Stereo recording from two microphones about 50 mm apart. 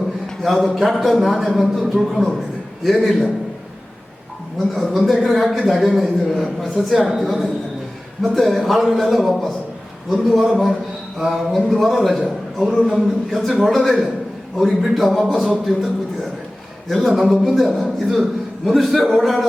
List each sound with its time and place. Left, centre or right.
0.4 s a man's voice: centre
4.5 s a man's voice: centre
8.2 s a man's voice: centre